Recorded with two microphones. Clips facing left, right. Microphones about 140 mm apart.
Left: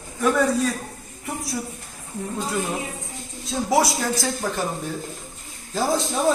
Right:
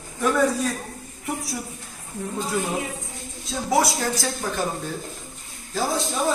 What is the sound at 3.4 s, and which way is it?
Speech, 20° left (ahead or behind).